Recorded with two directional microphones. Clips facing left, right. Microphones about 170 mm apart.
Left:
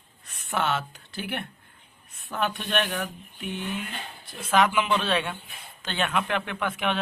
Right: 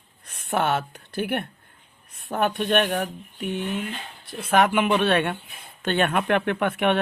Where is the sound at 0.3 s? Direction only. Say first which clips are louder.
Right 4 dB; 55° right (ahead or behind).